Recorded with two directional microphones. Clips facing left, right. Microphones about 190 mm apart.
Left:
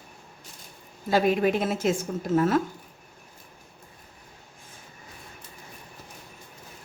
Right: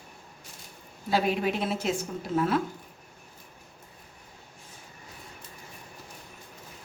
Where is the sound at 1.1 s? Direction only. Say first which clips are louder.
Left 4 dB; 50° left (ahead or behind).